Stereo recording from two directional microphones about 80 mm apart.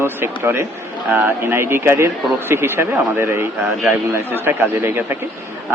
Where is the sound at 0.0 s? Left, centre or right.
Right.